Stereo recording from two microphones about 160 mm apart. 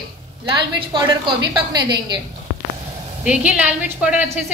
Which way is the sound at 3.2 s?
5° right (ahead or behind).